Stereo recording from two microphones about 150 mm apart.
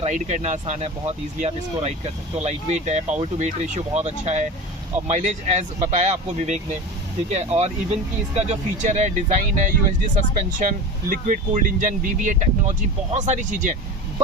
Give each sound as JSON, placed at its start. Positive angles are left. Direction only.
{"t": 0.0, "sound": "speech", "side_deg": -50}